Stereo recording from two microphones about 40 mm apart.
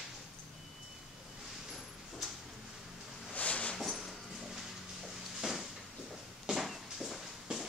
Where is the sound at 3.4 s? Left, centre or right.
Left.